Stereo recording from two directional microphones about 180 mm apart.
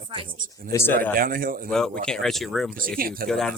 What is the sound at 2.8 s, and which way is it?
Speech, 55° right (ahead or behind).